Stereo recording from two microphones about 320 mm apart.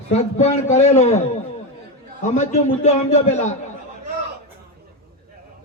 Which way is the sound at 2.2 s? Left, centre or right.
Left.